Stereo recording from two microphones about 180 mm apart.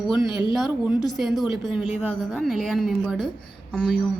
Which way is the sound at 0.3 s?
25° left (ahead or behind).